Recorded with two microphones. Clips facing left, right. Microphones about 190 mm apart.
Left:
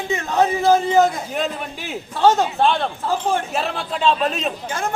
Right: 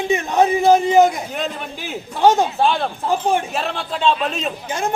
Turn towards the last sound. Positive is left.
turn(degrees=-15)  # may be behind; listen again after turning